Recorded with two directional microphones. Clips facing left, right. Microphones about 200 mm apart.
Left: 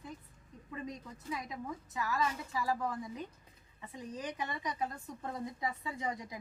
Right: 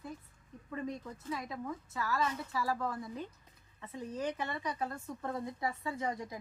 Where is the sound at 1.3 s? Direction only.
15° left (ahead or behind).